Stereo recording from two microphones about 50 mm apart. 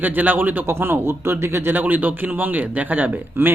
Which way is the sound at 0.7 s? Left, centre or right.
Right.